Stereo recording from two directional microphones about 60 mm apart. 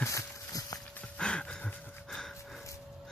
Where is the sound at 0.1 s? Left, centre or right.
Left.